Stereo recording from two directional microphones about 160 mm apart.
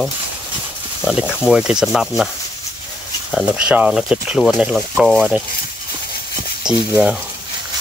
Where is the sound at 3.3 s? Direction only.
5° right (ahead or behind).